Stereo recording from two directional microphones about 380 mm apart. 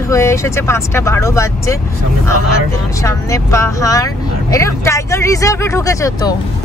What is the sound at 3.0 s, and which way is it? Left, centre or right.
Speech, centre.